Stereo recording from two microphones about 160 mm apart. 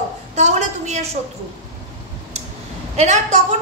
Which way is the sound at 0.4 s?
45° right (ahead or behind).